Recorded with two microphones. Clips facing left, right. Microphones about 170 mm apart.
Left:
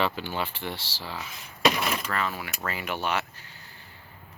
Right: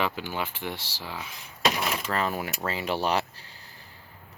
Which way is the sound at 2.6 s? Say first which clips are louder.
Right 2 dB; 30° right (ahead or behind).